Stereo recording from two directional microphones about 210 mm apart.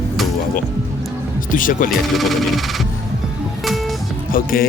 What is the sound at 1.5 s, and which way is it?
Mantra, 40° left (ahead or behind).